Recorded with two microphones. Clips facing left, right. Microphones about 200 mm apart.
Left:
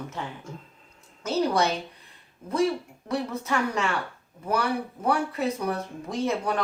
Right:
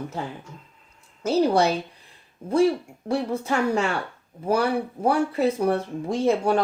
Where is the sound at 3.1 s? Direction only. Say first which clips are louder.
Right 4 dB; 30° right (ahead or behind).